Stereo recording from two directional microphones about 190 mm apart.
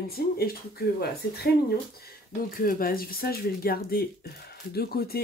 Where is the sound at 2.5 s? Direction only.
50° left (ahead or behind).